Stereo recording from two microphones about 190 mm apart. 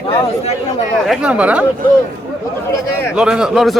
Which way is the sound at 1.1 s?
5° right (ahead or behind).